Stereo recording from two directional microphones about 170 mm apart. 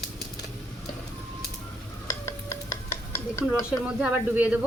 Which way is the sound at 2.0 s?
15° left (ahead or behind).